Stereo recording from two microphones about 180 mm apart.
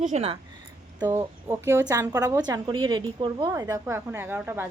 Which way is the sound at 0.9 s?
10° right (ahead or behind).